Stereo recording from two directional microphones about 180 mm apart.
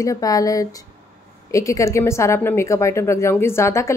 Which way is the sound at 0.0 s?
20° left (ahead or behind).